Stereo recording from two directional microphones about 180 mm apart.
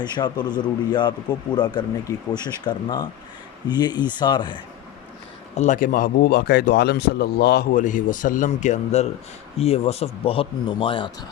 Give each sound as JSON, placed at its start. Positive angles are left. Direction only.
{"t": 0.0, "sound": "speech", "side_deg": 25}
{"t": 5.5, "sound": "a man's voice", "side_deg": 45}